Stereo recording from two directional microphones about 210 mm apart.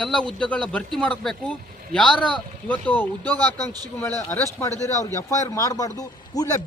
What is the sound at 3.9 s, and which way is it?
Speech, 10° left (ahead or behind).